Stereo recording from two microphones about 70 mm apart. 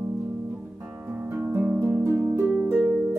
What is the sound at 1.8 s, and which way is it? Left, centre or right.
Music, right.